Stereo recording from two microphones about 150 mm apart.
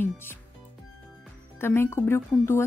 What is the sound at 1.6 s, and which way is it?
A woman's voice, 15° left (ahead or behind).